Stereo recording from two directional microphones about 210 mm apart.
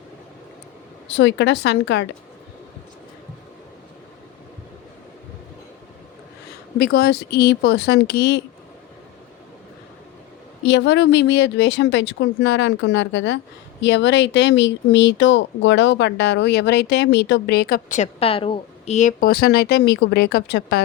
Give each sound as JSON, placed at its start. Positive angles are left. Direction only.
{"t": 1.0, "sound": "speech", "side_deg": 60}
{"t": 6.7, "sound": "speech", "side_deg": 45}
{"t": 10.7, "sound": "speech", "side_deg": 55}